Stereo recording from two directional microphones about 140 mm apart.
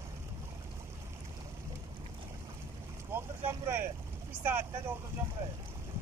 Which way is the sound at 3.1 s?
15° right (ahead or behind).